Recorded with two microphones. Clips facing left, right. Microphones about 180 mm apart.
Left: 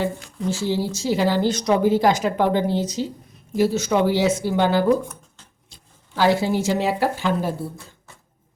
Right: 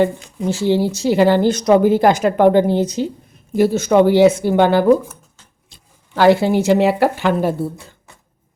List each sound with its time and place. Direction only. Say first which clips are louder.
0.2 s speech: right 4 dB; 20° right (ahead or behind)
0.5 s a woman's voice: right 8 dB; 65° right (ahead or behind)
6.1 s a woman's voice: right 6 dB; 60° right (ahead or behind)